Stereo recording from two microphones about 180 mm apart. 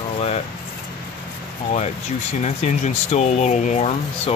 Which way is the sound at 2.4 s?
40° left (ahead or behind).